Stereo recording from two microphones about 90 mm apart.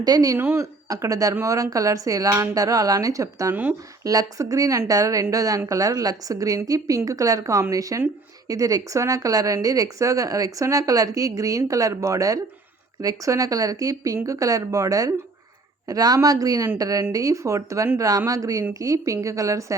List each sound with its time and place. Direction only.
0.0 s speech: 45° right (ahead or behind)
0.3 s speech: 30° right (ahead or behind)
3.5 s speech: 20° right (ahead or behind)
4.0 s speech: 40° right (ahead or behind)